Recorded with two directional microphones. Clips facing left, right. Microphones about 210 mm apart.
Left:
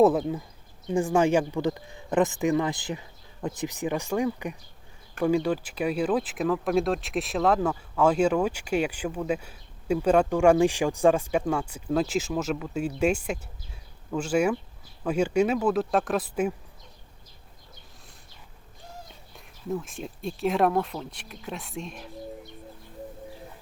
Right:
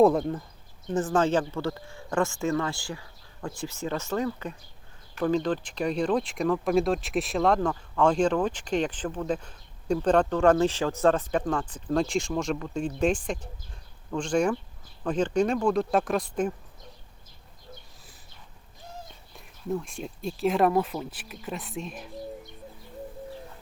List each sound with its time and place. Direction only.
0.0 s speech: 5° left (ahead or behind)
19.6 s speech: centre (ahead or behind)